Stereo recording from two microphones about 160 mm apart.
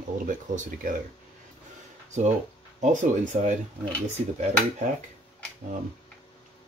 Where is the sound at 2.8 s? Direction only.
50° right (ahead or behind).